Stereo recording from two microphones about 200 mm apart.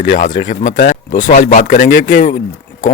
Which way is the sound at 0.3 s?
70° left (ahead or behind).